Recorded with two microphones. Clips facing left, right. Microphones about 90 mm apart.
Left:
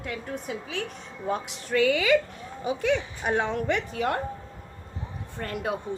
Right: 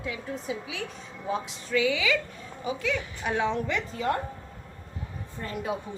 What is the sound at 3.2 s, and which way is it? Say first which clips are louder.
Speech: even; 50° left (ahead or behind).